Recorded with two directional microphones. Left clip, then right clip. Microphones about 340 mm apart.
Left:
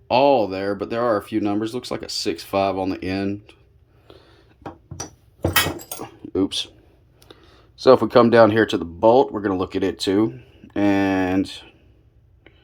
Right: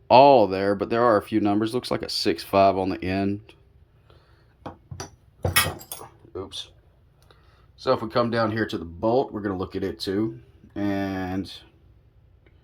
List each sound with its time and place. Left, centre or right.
0.1 s speech: centre
6.3 s speech: left; by 11.3 s centre